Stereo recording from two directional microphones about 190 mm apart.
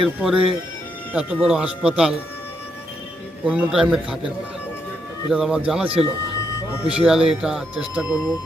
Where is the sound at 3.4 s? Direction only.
5° right (ahead or behind).